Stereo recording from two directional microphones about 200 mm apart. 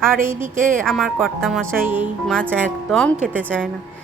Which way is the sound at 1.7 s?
10° right (ahead or behind).